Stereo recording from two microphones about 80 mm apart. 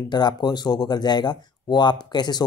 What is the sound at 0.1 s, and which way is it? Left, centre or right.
Speech, left.